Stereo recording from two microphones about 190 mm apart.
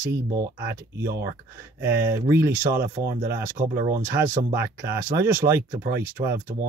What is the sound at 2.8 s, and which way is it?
Speech, 50° right (ahead or behind).